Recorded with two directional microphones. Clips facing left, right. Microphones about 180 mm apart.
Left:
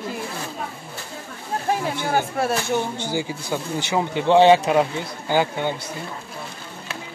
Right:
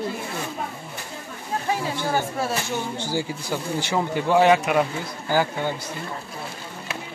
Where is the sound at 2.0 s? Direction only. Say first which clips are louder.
Left 3 dB; 60° left (ahead or behind).